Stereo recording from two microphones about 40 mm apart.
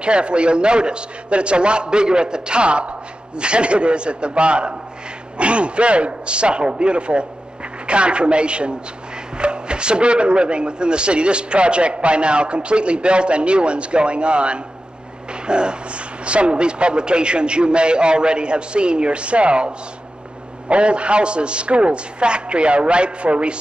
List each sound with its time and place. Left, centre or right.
0.0 s a man's voice: right